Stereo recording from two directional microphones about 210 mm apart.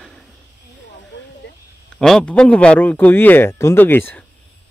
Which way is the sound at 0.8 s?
55° left (ahead or behind).